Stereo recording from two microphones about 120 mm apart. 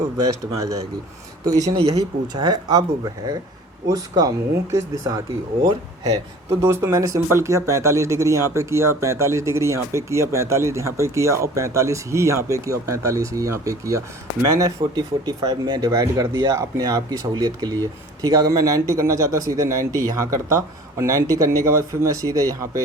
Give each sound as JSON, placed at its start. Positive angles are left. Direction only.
{"t": 0.5, "sound": "speech", "side_deg": -25}
{"t": 1.7, "sound": "speech", "side_deg": -50}
{"t": 2.0, "sound": "speech", "side_deg": -35}